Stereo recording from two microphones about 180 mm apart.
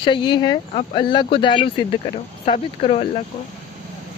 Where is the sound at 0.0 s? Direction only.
25° left (ahead or behind).